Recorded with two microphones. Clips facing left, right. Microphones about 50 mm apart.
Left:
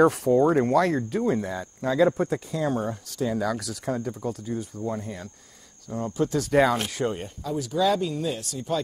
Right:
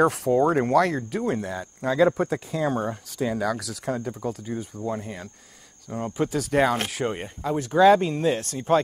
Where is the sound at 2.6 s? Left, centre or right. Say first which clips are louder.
Right 2 dB; centre.